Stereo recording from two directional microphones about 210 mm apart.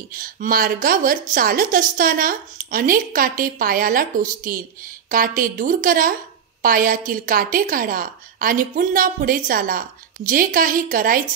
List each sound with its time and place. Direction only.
0.2 s a woman's voice: 45° right (ahead or behind)